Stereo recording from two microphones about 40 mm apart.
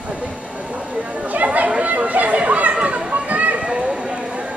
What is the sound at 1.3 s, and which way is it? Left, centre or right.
Chatter, right.